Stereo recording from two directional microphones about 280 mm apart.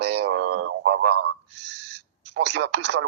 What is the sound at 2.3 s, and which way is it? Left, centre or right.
Speech, right.